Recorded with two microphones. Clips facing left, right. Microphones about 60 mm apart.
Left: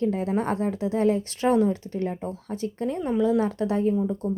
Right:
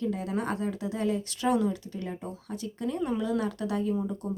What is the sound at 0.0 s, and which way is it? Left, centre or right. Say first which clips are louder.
A woman's voice: left 6 dB; left.